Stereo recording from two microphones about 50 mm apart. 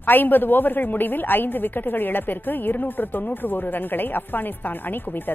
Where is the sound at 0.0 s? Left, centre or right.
Left.